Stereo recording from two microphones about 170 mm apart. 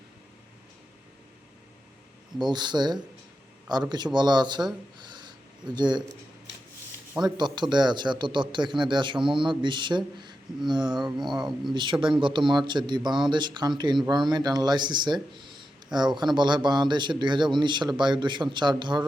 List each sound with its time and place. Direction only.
2.4 s a man's voice: 25° right (ahead or behind)
7.3 s a man's voice: 25° right (ahead or behind)
11.2 s speech: centre (ahead or behind)
11.7 s a man's voice: 25° right (ahead or behind)